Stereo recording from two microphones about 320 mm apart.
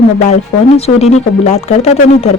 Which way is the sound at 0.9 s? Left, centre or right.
Centre.